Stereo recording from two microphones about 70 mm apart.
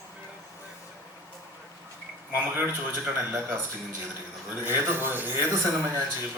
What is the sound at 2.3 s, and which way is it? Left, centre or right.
A man's voice, right.